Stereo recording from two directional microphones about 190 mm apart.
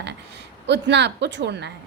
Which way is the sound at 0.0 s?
65° right (ahead or behind).